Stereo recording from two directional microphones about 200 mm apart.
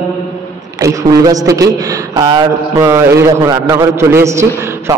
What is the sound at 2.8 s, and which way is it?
A man's voice, 15° right (ahead or behind).